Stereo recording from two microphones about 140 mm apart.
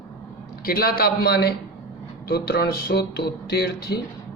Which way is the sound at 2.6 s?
90° left.